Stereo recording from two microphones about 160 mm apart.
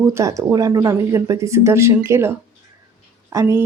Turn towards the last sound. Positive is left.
turn(degrees=-15)  # may be behind; listen again after turning